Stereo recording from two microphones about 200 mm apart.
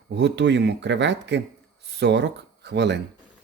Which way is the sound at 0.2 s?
60° right (ahead or behind).